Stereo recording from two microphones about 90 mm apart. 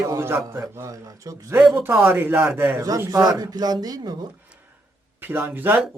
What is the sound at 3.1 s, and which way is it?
Speech, 45° right (ahead or behind).